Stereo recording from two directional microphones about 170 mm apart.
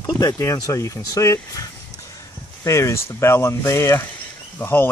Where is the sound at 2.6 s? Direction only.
15° left (ahead or behind).